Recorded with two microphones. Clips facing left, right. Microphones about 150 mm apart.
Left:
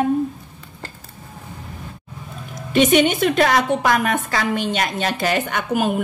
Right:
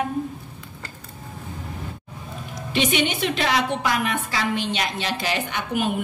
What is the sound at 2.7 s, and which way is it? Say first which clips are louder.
A woman's voice: left 8 dB; 45° left (ahead or behind).